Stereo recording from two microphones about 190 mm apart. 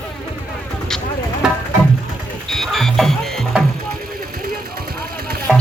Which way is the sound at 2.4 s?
Centre (ahead or behind).